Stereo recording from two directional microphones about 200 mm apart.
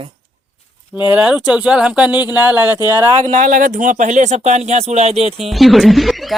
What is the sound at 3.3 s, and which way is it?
Speech, 40° right (ahead or behind).